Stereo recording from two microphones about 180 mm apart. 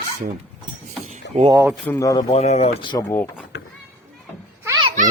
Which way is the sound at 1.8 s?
20° left (ahead or behind).